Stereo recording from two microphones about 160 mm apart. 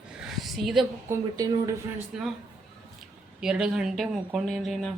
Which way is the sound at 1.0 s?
20° right (ahead or behind).